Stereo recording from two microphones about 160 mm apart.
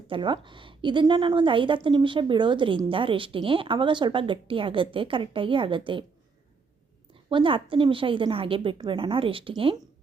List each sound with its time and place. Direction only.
0.1 s a woman's voice: 30° right (ahead or behind)
7.1 s a woman's voice: 30° right (ahead or behind)